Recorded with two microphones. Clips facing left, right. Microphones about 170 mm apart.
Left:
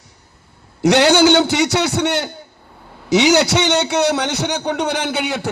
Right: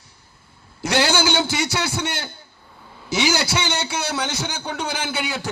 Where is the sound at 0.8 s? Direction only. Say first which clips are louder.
Left 8 dB; 70° left (ahead or behind).